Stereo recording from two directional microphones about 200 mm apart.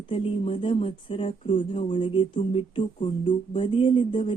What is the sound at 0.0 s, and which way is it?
Speech, 25° left (ahead or behind).